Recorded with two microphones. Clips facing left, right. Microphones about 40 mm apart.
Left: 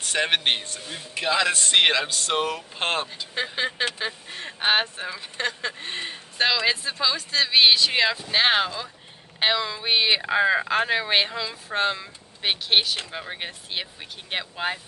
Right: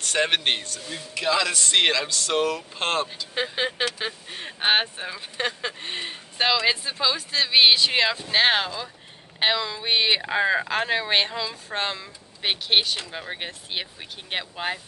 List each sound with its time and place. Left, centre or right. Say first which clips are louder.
0.0 s speech: even; centre
0.8 s speech: right 1 dB; left
2.3 s speech: right 3 dB; centre
3.5 s speech: left 1 dB; centre